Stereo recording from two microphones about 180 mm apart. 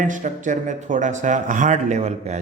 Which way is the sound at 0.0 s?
45° right (ahead or behind).